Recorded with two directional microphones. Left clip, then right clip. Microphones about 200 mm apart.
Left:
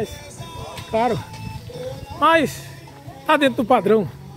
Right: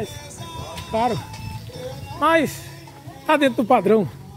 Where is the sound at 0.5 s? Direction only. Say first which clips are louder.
Even; 40° right (ahead or behind).